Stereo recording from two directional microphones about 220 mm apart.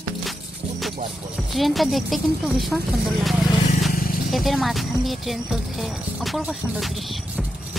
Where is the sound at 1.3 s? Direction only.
Centre (ahead or behind).